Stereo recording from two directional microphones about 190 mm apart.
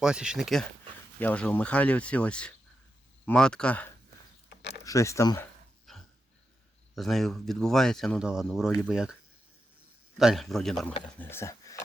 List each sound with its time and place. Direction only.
0.0 s speech: 5° right (ahead or behind); by 5.5 s 15° left (ahead or behind)
5.9 s dog: centre (ahead or behind)
6.9 s speech: centre (ahead or behind)
10.2 s speech: centre (ahead or behind)
11.2 s speech: 15° left (ahead or behind)